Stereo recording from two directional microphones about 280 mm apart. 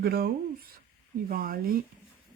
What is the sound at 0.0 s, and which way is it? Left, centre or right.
Speech, right.